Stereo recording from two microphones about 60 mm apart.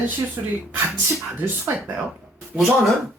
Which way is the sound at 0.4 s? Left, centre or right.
Right.